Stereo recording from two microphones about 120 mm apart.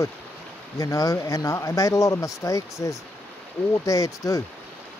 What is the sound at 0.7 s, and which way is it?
Speech, 25° left (ahead or behind).